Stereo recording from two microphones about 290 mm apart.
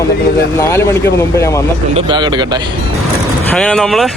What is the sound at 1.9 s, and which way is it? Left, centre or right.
Speech, centre.